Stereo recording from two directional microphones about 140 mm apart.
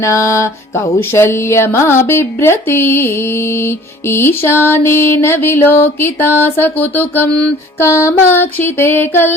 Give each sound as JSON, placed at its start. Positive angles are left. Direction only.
{"t": 0.0, "sound": "music", "side_deg": 20}